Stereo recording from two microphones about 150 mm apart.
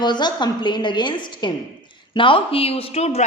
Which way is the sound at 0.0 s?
30° left (ahead or behind).